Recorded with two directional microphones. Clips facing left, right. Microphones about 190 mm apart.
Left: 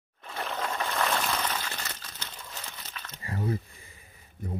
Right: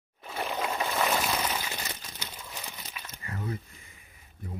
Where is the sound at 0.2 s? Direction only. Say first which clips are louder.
Right 2 dB; 10° right (ahead or behind).